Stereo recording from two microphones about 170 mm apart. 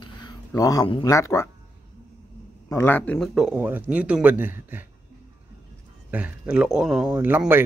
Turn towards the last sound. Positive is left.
turn(degrees=-10)  # may be behind; listen again after turning